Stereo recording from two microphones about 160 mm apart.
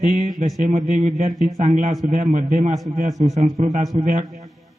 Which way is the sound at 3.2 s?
45° right (ahead or behind).